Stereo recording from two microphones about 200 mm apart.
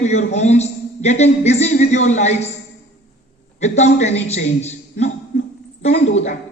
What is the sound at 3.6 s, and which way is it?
A woman's voice, 35° left (ahead or behind).